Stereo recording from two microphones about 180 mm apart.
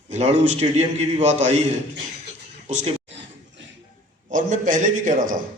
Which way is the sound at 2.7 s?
40° right (ahead or behind).